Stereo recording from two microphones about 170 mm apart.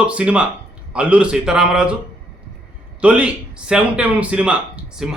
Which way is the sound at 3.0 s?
5° right (ahead or behind).